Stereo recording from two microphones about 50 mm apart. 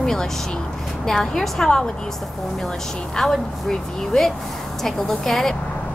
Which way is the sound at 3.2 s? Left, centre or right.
Centre.